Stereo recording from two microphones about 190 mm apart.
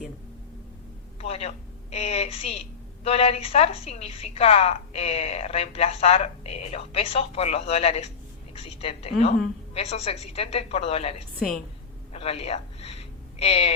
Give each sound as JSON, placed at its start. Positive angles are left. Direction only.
{"t": 1.2, "sound": "a woman's voice", "side_deg": 35}
{"t": 11.3, "sound": "a woman's voice", "side_deg": 0}
{"t": 12.1, "sound": "a sound", "side_deg": 30}